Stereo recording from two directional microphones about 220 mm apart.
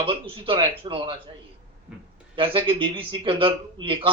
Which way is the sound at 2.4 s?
25° right (ahead or behind).